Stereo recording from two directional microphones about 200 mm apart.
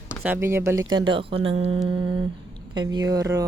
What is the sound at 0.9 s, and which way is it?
Speech, 25° right (ahead or behind).